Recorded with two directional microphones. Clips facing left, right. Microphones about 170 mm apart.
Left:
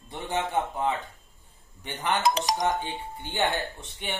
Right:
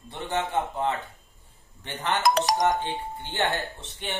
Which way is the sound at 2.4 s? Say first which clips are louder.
Right 3 dB; 50° right (ahead or behind).